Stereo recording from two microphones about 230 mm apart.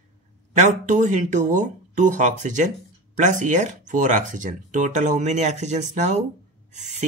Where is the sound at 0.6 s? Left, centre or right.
Right.